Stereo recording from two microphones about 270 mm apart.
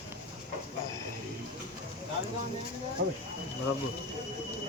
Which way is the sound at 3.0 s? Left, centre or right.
Right.